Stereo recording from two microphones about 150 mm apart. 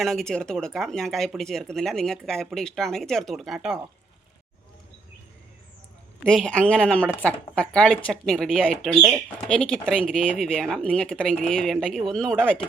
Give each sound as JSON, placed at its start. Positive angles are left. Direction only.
{"t": 0.0, "sound": "speech", "side_deg": 0}
{"t": 6.2, "sound": "speech", "side_deg": 5}
{"t": 8.9, "sound": "speech", "side_deg": -15}
{"t": 9.5, "sound": "speech", "side_deg": 5}